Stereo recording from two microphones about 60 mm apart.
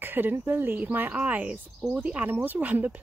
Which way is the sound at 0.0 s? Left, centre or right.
Right.